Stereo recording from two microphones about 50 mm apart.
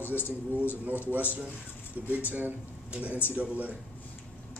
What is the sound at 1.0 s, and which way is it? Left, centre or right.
A man's voice, right.